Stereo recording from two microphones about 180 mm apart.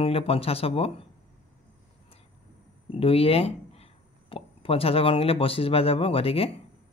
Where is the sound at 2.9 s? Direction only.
35° left (ahead or behind).